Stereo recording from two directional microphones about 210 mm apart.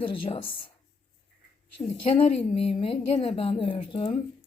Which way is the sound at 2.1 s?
30° left (ahead or behind).